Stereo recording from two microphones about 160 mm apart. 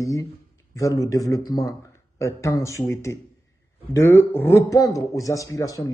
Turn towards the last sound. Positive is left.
turn(degrees=20)  # may be behind; listen again after turning